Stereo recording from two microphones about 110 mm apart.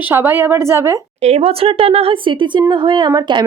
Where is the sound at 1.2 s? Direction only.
75° right (ahead or behind); by 3.4 s 40° right (ahead or behind).